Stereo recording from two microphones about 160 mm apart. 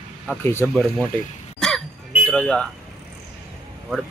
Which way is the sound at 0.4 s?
15° left (ahead or behind).